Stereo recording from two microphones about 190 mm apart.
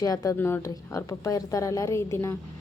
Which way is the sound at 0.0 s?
20° left (ahead or behind).